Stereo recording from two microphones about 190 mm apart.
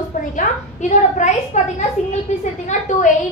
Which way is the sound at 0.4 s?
40° left (ahead or behind).